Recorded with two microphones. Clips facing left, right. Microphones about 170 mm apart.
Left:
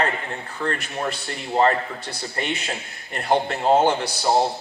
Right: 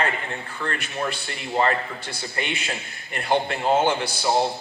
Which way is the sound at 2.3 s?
35° left (ahead or behind).